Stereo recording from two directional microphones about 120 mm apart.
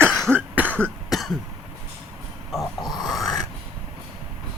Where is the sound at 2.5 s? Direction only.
Centre (ahead or behind).